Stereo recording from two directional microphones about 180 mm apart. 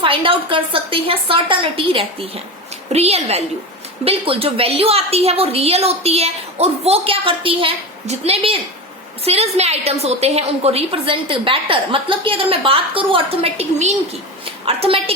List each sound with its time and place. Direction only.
0.0 s a woman's voice: 30° right (ahead or behind)